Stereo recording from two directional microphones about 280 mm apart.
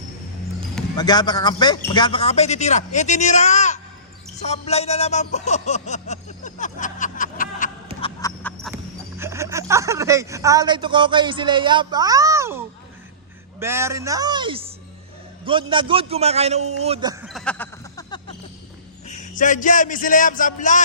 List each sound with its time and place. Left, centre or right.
0.9 s speech: centre
8.2 s music: centre
8.7 s a man's voice: centre
17.2 s a sound: centre
19.0 s a man's voice: left